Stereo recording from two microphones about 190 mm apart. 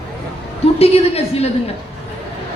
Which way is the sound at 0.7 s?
30° left (ahead or behind).